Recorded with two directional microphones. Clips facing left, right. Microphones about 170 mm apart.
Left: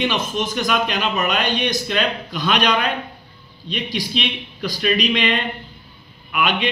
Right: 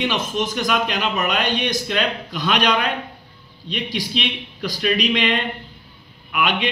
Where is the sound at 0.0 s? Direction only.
10° right (ahead or behind).